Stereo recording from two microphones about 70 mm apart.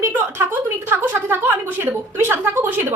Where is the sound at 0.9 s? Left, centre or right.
Right.